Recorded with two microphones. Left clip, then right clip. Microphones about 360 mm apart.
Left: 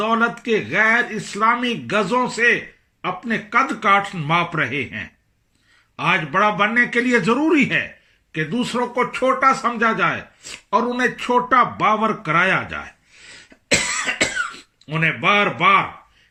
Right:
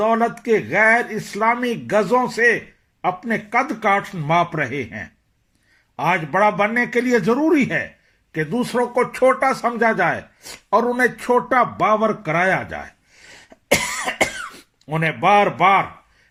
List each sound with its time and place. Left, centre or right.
0.0 s speech: centre
14.8 s speech: centre